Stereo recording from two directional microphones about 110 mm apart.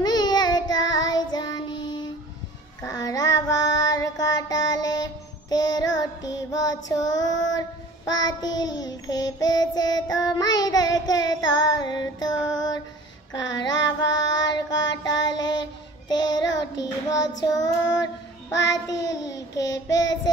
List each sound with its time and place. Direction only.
0.0 s child singing: 40° left (ahead or behind)
18.7 s child singing: 30° left (ahead or behind)